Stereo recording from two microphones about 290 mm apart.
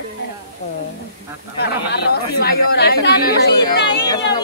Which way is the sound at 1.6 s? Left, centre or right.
Left.